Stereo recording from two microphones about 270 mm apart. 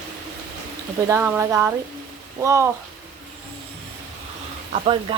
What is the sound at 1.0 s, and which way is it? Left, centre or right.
A woman's voice, centre.